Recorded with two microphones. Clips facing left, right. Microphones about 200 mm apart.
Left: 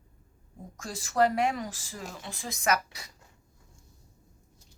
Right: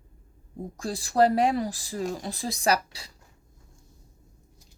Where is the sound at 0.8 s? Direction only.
35° right (ahead or behind).